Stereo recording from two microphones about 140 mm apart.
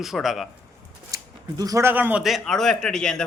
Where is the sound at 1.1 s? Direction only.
25° right (ahead or behind).